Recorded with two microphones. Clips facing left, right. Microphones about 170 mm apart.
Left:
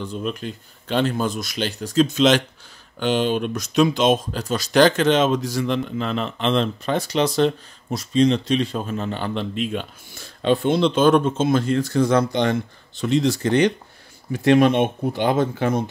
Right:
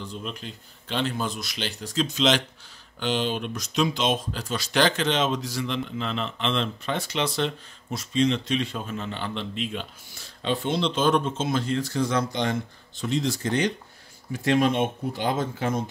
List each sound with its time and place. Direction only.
0.0 s speech: 55° left (ahead or behind)